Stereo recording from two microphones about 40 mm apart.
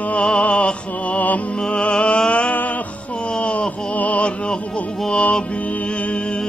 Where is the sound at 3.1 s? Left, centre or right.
Left.